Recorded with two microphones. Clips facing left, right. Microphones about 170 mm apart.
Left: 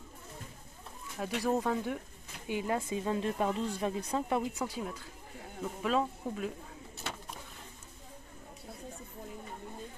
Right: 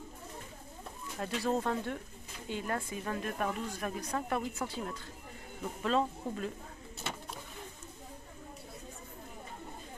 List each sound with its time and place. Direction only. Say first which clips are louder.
1.2 s speech: left 1 dB; 10° left (ahead or behind)